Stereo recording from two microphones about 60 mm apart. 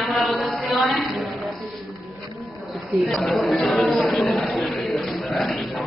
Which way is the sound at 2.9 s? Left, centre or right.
Centre.